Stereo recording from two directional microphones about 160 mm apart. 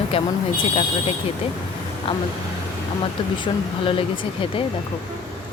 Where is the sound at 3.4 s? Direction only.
35° left (ahead or behind).